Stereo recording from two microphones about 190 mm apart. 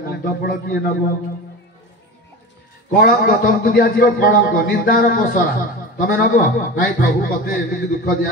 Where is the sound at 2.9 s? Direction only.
50° left (ahead or behind).